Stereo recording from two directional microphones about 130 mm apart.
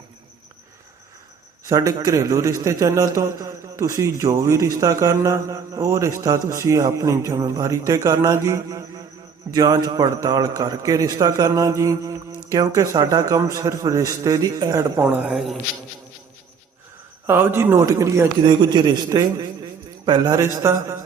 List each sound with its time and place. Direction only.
1.6 s a man's voice: 25° right (ahead or behind); by 15.5 s 10° right (ahead or behind)
17.2 s a man's voice: 15° right (ahead or behind)
18.4 s a man's voice: 35° right (ahead or behind)
20.4 s a man's voice: 20° right (ahead or behind)